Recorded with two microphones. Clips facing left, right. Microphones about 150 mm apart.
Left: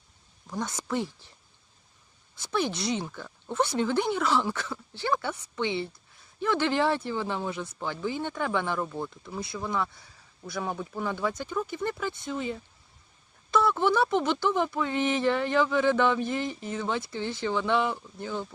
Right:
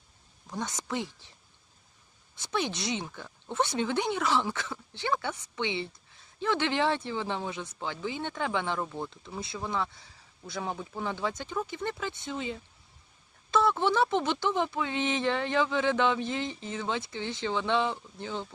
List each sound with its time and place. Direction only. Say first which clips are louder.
0.5 s speech: left 3 dB; 20° right (ahead or behind)
2.3 s speech: left 3 dB; 20° right (ahead or behind)